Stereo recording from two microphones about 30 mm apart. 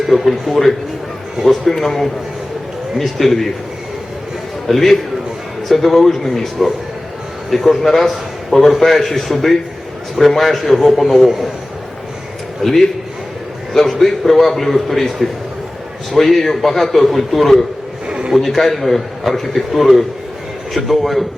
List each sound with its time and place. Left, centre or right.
0.1 s a man's voice: centre
1.4 s speech: right
1.8 s a man's voice: centre
4.7 s a man's voice: centre
7.8 s a man's voice: centre
12.6 s a man's voice: centre